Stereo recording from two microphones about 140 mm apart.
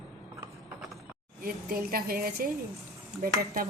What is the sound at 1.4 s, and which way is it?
A woman's voice, 90° right.